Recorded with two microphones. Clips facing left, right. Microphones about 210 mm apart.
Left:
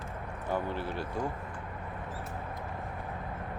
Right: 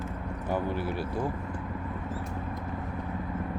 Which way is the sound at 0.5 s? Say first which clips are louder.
Right 3 dB; 10° right (ahead or behind).